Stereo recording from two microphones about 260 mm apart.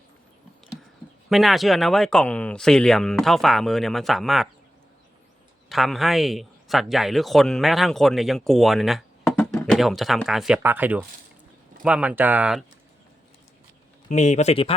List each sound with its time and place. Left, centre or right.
1.3 s speech: centre
5.6 s speech: centre
14.1 s speech: left